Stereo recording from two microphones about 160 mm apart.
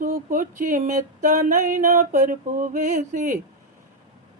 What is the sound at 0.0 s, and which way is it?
Music, 55° right (ahead or behind).